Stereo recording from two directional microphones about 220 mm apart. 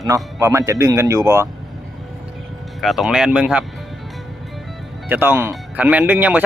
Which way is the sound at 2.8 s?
Centre (ahead or behind).